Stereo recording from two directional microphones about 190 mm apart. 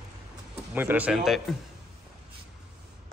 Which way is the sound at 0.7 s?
10° right (ahead or behind).